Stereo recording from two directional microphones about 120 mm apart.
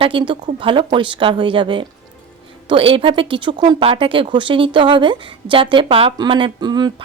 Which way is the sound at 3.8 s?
50° right (ahead or behind).